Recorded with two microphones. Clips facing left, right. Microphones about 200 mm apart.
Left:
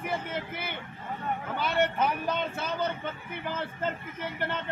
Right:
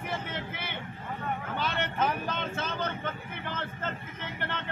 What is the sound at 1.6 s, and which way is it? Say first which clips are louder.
Speech: left 4 dB; 10° left (ahead or behind).